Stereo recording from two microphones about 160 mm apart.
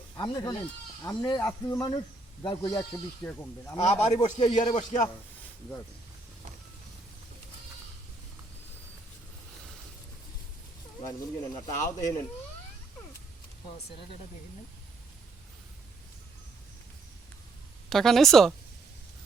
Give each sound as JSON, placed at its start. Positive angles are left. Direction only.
{"t": 0.2, "sound": "a man's voice", "side_deg": 25}
{"t": 3.9, "sound": "a man's voice", "side_deg": 25}
{"t": 4.2, "sound": "speech", "side_deg": 40}
{"t": 4.7, "sound": "speech", "side_deg": 50}
{"t": 11.0, "sound": "a man's voice", "side_deg": 20}
{"t": 11.6, "sound": "speech", "side_deg": 55}
{"t": 11.9, "sound": "a man's voice", "side_deg": 20}
{"t": 17.8, "sound": "speech", "side_deg": 0}